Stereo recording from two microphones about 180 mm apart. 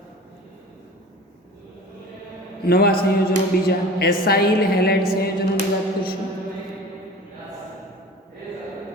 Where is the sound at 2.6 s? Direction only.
60° left (ahead or behind).